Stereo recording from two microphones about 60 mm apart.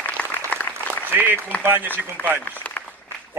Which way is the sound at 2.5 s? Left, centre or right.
Left.